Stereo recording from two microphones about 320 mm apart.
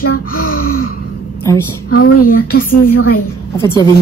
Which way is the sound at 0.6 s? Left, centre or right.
Left.